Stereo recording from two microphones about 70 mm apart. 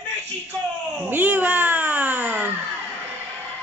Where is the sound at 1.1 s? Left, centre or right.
Right.